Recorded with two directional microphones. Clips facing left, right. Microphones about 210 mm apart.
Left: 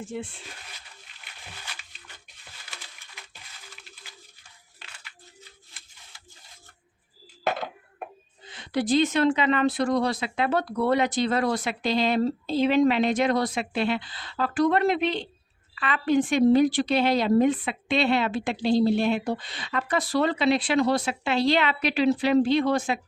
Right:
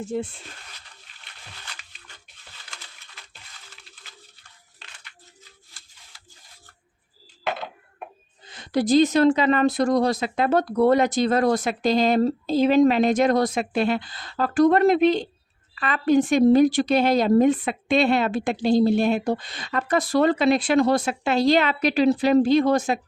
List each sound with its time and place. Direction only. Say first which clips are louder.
0.0 s speech: right 6 dB; 40° right (ahead or behind)
7.4 s a sound: left 1 dB; 45° left (ahead or behind)
8.4 s a woman's voice: right 4 dB; 40° right (ahead or behind)